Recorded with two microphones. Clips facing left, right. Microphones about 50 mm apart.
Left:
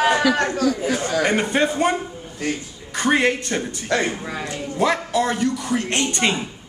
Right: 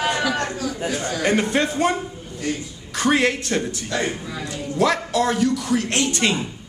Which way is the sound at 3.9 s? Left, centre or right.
Left.